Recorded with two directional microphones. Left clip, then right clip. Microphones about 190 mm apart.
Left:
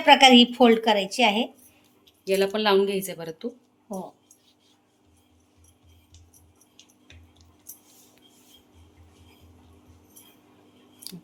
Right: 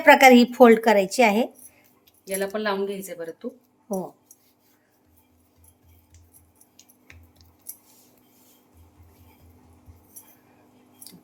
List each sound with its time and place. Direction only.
0.0 s a woman's voice: 35° right (ahead or behind)
2.2 s speech: 40° left (ahead or behind)